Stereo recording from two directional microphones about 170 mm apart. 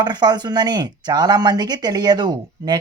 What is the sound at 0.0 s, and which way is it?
Speech, 25° right (ahead or behind).